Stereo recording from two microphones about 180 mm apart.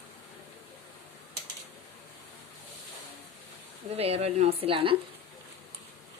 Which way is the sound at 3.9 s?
35° right (ahead or behind).